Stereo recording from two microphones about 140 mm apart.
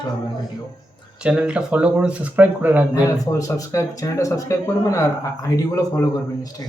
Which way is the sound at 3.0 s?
25° left (ahead or behind).